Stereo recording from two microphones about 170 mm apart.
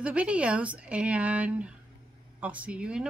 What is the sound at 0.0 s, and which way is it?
A woman's voice, 5° right (ahead or behind).